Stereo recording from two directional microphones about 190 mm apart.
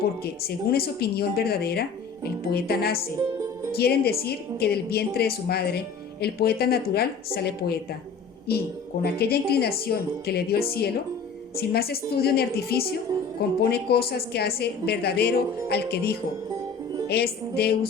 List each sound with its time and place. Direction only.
0.0 s a woman's voice: 55° left (ahead or behind)